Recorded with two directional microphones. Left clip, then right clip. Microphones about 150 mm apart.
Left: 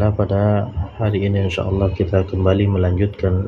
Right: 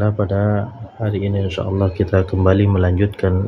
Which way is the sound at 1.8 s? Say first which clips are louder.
Right 2 dB; 20° right (ahead or behind).